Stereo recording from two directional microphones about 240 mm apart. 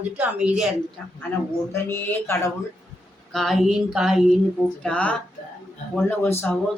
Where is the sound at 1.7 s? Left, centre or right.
Centre.